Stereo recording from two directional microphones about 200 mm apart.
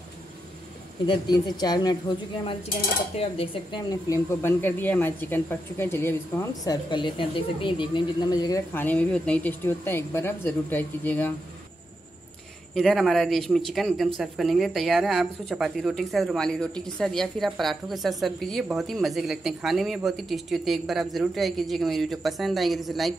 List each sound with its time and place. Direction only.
1.0 s a woman's voice: 20° left (ahead or behind)
3.2 s a woman's voice: 30° left (ahead or behind)
3.9 s speech: 15° left (ahead or behind)
12.7 s speech: centre (ahead or behind)